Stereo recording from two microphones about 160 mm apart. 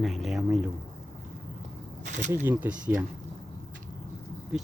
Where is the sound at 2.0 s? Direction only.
50° right (ahead or behind).